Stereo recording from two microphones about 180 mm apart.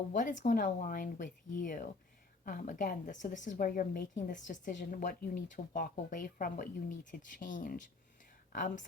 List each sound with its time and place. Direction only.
0.1 s a woman's voice: 45° left (ahead or behind)